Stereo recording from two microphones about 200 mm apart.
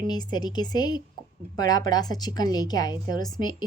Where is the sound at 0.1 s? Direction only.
20° left (ahead or behind).